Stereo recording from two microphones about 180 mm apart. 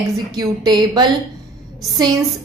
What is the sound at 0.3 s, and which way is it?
Speech, 20° right (ahead or behind).